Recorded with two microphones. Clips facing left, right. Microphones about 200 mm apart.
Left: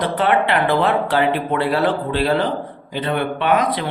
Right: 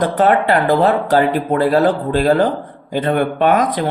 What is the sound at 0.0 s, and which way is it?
Speech, 45° right (ahead or behind).